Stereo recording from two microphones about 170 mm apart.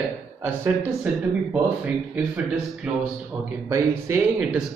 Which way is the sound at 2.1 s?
5° right (ahead or behind).